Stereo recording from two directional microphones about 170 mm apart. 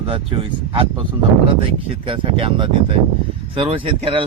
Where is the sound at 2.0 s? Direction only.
30° right (ahead or behind).